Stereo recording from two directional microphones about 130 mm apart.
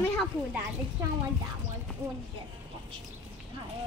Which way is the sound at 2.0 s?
20° right (ahead or behind).